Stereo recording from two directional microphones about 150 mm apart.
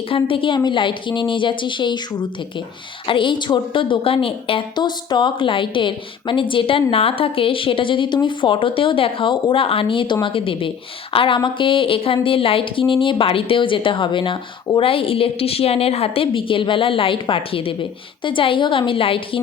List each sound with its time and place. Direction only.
0.1 s speech: 35° left (ahead or behind)
3.1 s speech: 35° left (ahead or behind)